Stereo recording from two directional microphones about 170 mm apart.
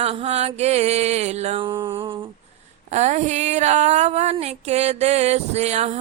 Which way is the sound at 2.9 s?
45° right (ahead or behind).